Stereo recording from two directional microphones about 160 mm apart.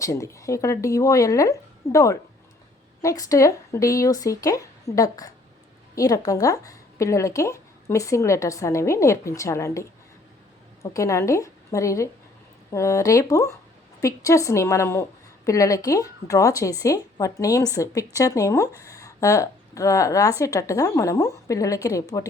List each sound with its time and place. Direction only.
0.0 s speech: 20° left (ahead or behind)
10.9 s speech: 20° left (ahead or behind)